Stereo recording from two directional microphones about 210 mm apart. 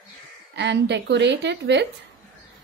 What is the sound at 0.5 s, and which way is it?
Speech, 55° right (ahead or behind).